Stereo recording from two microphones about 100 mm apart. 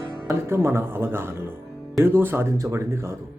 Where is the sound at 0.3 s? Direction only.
25° right (ahead or behind).